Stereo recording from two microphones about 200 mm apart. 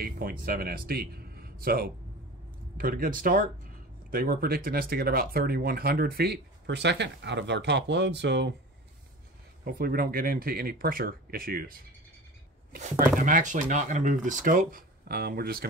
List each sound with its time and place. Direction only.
0.0 s speech: 45° right (ahead or behind)
9.7 s speech: 50° right (ahead or behind)
12.7 s speech: 40° right (ahead or behind)